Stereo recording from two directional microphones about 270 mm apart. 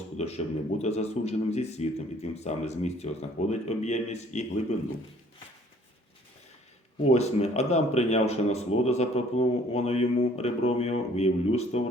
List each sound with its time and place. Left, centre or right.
0.2 s a man's voice: left
7.0 s a man's voice: left